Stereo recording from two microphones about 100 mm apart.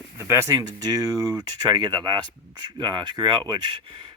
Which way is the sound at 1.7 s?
50° right (ahead or behind).